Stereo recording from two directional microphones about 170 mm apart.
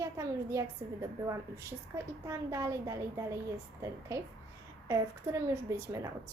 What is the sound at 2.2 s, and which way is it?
A woman's voice, 15° right (ahead or behind).